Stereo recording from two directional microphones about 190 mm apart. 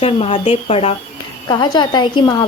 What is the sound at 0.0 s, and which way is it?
A woman's voice, 30° left (ahead or behind).